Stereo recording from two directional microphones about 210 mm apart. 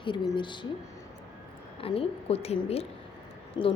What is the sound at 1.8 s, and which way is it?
A woman's voice, 25° left (ahead or behind).